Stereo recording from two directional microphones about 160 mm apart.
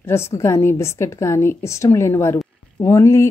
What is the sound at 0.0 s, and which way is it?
A woman's voice, 15° left (ahead or behind).